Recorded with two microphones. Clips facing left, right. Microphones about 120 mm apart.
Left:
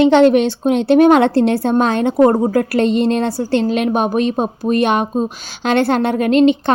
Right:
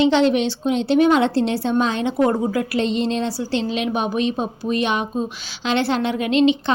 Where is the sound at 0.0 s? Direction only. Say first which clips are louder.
Left 6 dB; 55° left (ahead or behind).